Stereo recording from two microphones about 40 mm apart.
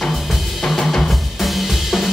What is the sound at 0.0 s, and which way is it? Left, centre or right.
Drum, centre.